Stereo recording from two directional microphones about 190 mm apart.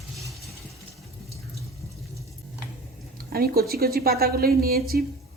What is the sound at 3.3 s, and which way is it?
A woman's voice, 55° right (ahead or behind).